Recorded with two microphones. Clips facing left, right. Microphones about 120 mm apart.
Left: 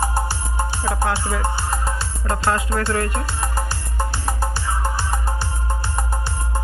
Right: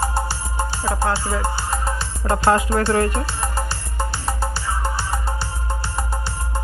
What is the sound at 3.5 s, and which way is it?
Music, 10° left (ahead or behind).